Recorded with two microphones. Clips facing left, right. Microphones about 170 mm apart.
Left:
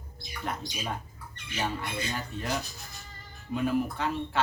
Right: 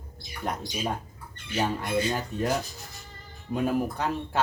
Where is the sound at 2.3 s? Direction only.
45° right (ahead or behind).